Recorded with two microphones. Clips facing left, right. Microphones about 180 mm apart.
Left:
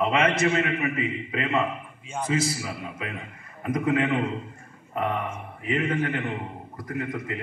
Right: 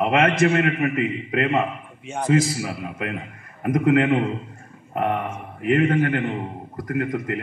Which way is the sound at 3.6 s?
60° right (ahead or behind).